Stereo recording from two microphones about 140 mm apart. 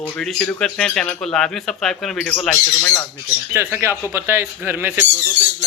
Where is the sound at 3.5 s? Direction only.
15° right (ahead or behind).